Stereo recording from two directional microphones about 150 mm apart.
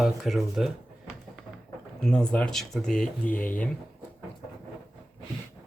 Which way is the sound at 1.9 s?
5° left (ahead or behind).